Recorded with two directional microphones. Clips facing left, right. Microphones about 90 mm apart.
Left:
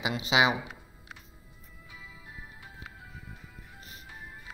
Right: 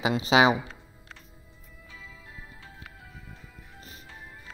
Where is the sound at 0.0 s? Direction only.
35° right (ahead or behind).